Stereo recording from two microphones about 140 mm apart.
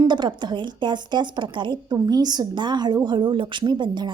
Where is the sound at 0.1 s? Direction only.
35° right (ahead or behind).